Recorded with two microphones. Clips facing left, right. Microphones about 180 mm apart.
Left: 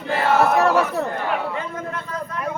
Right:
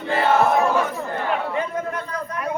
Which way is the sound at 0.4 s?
70° left (ahead or behind).